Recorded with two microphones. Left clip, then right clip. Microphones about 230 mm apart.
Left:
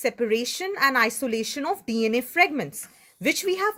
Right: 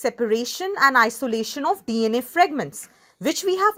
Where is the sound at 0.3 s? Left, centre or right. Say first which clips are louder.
Right 3 dB; centre.